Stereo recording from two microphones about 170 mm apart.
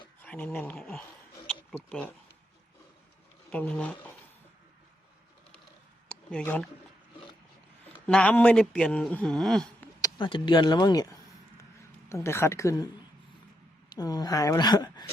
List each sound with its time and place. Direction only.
0.2 s a woman's voice: 10° left (ahead or behind)
3.5 s a woman's voice: 5° left (ahead or behind)
6.1 s a sound: 5° left (ahead or behind)
8.0 s speech: 5° left (ahead or behind)
10.0 s a woman's voice: 30° left (ahead or behind)
13.9 s speech: 25° left (ahead or behind)